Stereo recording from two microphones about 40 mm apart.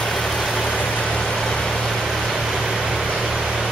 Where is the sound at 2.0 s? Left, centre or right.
Centre.